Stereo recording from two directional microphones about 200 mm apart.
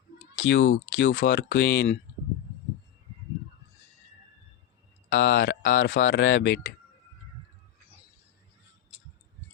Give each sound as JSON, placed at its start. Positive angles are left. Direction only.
{"t": 0.3, "sound": "speech", "side_deg": 70}
{"t": 5.0, "sound": "speech", "side_deg": 65}